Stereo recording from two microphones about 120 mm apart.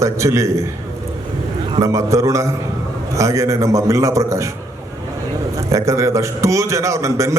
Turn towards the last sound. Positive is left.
turn(degrees=-25)  # may be behind; listen again after turning